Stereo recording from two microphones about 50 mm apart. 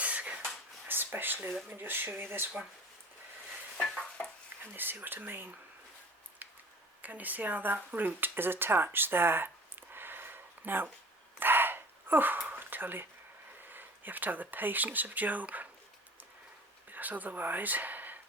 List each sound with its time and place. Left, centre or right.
0.0 s a sound: right
0.9 s a sound: right
1.7 s speech: right
3.8 s dishes: centre
4.6 s speech: right
7.0 s speech: right
11.3 s a sound: right
13.7 s speech: right
16.9 s speech: right